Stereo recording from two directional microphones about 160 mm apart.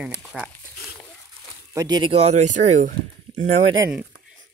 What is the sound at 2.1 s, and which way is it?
Speech, 45° right (ahead or behind).